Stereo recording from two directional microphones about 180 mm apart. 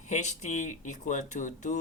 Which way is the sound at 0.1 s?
40° left (ahead or behind).